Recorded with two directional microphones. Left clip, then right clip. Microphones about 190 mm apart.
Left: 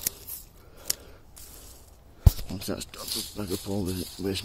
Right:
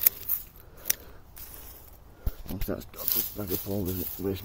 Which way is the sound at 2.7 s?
15° left (ahead or behind).